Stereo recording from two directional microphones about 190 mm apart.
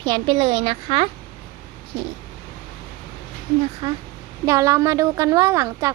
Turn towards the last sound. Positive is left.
turn(degrees=-15)  # may be behind; listen again after turning